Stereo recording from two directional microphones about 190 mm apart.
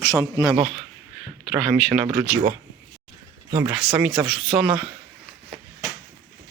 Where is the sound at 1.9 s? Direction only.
10° right (ahead or behind).